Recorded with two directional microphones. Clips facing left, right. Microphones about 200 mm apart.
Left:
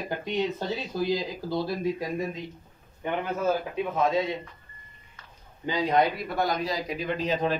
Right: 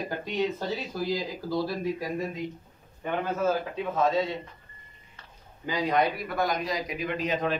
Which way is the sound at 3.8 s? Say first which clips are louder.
Even; 15° left (ahead or behind).